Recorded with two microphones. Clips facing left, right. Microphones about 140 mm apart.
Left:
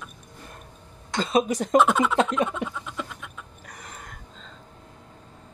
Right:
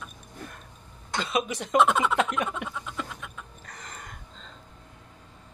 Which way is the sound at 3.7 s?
10° left (ahead or behind).